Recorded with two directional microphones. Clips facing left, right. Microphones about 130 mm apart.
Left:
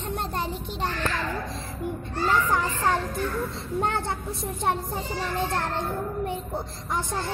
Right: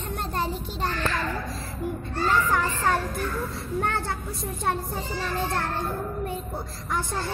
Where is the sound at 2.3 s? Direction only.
20° left (ahead or behind).